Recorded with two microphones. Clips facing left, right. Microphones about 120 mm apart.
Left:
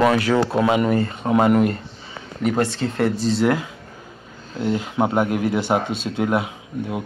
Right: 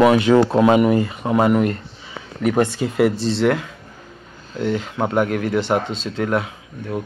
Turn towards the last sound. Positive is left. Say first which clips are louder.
# even
turn(degrees=10)  # may be behind; listen again after turning